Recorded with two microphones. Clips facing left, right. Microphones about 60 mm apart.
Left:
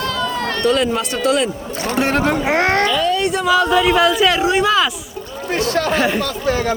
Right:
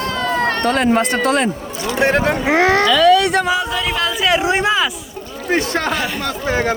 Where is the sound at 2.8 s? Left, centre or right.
Right.